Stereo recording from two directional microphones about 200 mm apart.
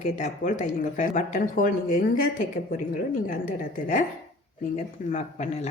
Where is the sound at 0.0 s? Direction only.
40° left (ahead or behind).